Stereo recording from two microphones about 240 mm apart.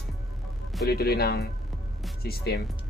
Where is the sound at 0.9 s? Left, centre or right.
Left.